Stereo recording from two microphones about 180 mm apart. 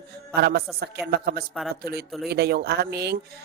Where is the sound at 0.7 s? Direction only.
60° right (ahead or behind).